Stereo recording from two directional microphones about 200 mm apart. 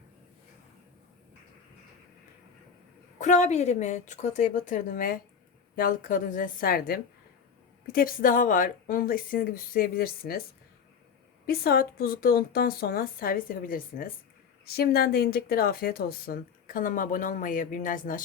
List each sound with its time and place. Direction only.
3.2 s speech: 35° left (ahead or behind)
11.4 s speech: 50° left (ahead or behind)